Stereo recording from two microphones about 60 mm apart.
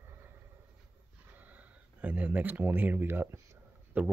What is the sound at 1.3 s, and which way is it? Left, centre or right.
Speech, right.